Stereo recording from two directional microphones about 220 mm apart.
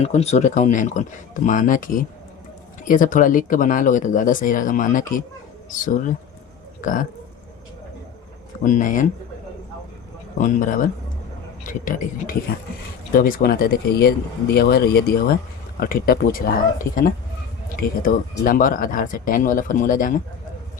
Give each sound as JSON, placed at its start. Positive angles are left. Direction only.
{"t": 0.0, "sound": "speech", "side_deg": 30}
{"t": 8.6, "sound": "speech", "side_deg": 35}
{"t": 10.3, "sound": "speech", "side_deg": 35}
{"t": 17.7, "sound": "speech", "side_deg": 40}